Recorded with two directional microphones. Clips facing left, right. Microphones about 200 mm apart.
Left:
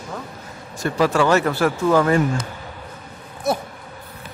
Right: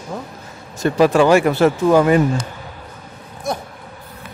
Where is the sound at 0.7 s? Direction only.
20° right (ahead or behind).